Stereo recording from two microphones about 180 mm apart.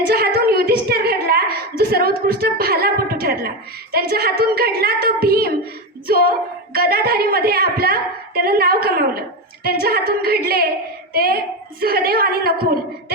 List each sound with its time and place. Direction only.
0.1 s a sound: 60° right (ahead or behind)
3.9 s a woman's voice: 60° right (ahead or behind)
11.1 s child singing: 60° right (ahead or behind)
11.8 s a woman's voice: 60° right (ahead or behind)